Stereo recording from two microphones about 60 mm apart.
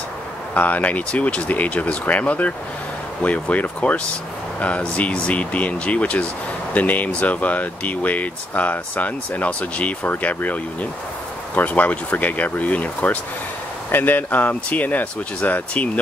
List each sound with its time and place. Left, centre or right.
0.6 s speech: left